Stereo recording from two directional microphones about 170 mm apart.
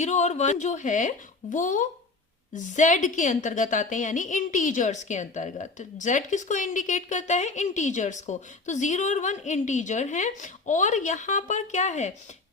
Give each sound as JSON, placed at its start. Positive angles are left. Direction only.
{"t": 0.0, "sound": "a woman's voice", "side_deg": 45}